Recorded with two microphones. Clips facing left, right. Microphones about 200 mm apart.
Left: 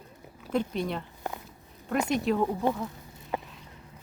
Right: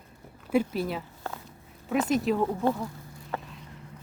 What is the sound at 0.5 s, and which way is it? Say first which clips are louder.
Speech: right 3 dB; 5° right (ahead or behind).